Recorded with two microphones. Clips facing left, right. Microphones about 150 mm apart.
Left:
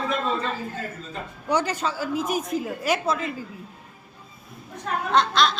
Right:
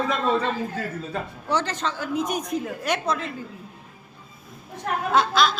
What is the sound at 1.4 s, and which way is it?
A woman's voice, 10° left (ahead or behind).